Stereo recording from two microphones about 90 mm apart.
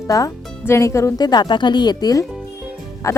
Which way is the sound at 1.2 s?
50° left (ahead or behind).